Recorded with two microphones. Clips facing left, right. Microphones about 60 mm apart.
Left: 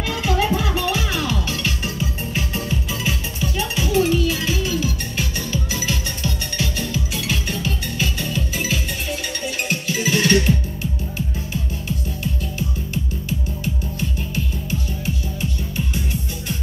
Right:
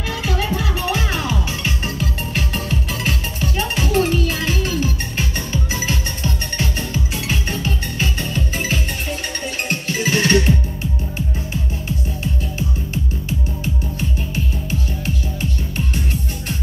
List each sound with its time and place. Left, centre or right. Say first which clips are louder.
0.2 s music: left 3 dB; centre
0.8 s music: right 1 dB; right
1.3 s music: right 1 dB; centre
2.0 s music: right 1 dB; right